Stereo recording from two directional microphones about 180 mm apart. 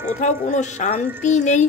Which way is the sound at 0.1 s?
40° left (ahead or behind).